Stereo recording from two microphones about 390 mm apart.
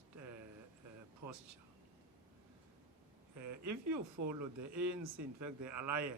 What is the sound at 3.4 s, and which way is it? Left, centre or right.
Speech, right.